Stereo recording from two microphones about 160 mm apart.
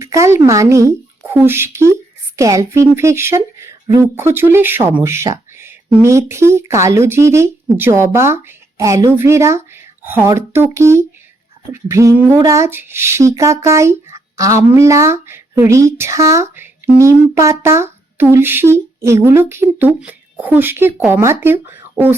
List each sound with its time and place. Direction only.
0.0 s speech: 20° right (ahead or behind)